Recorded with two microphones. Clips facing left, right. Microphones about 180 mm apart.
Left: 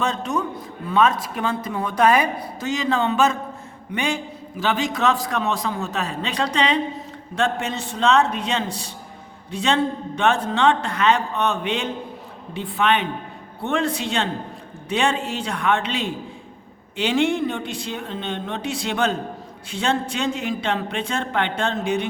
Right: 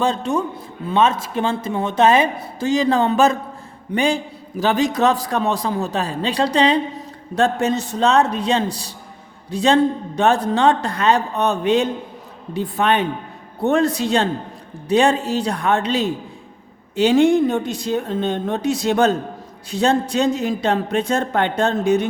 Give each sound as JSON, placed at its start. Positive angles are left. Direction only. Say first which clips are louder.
{"t": 0.0, "sound": "a man's voice", "louder": "right 4 dB", "side_deg": -30}